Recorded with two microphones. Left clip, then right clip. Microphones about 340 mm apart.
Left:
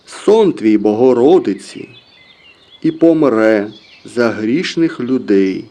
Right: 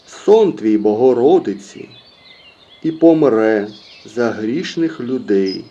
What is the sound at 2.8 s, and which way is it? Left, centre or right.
Speech, left.